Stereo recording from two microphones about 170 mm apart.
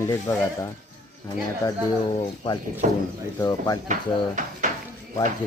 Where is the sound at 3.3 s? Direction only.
20° left (ahead or behind).